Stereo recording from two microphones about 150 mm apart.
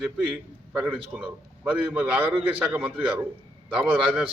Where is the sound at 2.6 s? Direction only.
10° right (ahead or behind).